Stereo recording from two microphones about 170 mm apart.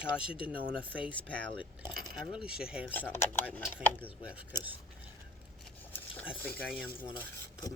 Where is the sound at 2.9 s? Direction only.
10° left (ahead or behind).